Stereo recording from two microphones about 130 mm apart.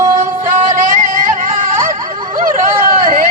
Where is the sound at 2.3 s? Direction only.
90° right.